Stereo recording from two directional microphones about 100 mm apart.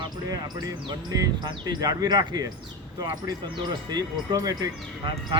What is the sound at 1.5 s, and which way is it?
Speech, 40° right (ahead or behind).